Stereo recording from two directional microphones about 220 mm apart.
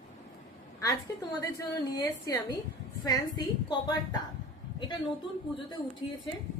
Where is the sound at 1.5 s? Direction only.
15° left (ahead or behind).